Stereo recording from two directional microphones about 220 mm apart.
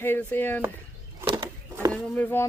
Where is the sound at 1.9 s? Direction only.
5° left (ahead or behind).